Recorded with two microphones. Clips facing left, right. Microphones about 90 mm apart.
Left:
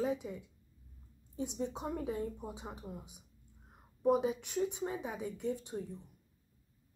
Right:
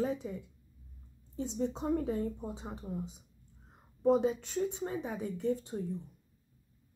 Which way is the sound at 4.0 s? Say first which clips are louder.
Right 3 dB; 10° left (ahead or behind).